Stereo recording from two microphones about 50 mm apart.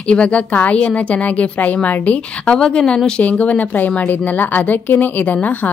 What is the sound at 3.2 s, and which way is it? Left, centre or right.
A woman's voice, left.